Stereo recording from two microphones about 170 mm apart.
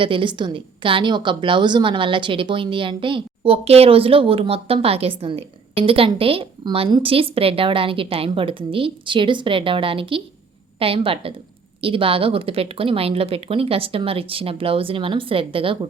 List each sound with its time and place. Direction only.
0.0 s a woman's voice: 30° right (ahead or behind)